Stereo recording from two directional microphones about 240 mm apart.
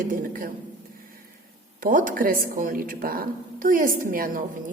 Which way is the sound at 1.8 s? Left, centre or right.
Right.